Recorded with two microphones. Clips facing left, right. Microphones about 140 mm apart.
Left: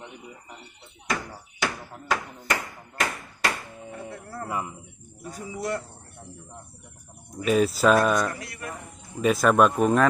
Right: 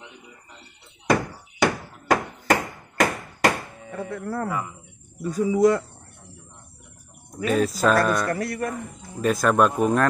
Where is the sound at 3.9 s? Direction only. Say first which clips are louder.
Right 8 dB; 90° right.